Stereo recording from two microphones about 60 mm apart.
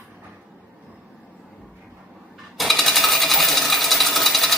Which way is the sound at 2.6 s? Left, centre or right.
Centre.